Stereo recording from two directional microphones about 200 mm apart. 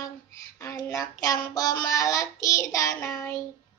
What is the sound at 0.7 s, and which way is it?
Child singing, 15° left (ahead or behind).